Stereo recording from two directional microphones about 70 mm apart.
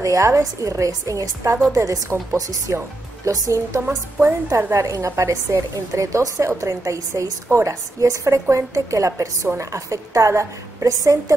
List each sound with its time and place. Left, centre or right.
0.0 s a woman's voice: right
4.6 s a woman's voice: right
4.8 s a woman's voice: right